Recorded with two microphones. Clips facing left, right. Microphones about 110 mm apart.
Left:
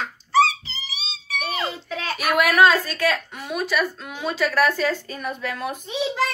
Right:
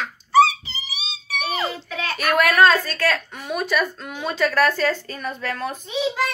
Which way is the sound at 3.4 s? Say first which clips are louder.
Right 1 dB; centre (ahead or behind).